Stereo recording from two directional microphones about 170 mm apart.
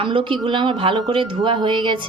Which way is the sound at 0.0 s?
30° right (ahead or behind).